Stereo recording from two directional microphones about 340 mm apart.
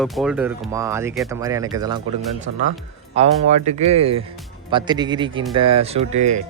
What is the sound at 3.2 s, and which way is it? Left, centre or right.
Speech, centre.